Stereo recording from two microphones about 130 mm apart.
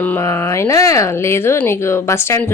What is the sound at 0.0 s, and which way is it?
Speech, 15° left (ahead or behind).